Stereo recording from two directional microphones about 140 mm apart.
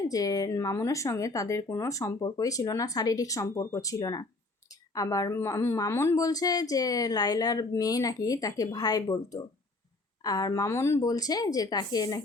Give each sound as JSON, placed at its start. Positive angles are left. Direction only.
{"t": 0.1, "sound": "speech", "side_deg": 25}